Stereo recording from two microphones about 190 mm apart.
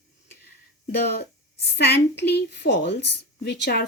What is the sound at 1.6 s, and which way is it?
A woman's voice, 60° left (ahead or behind).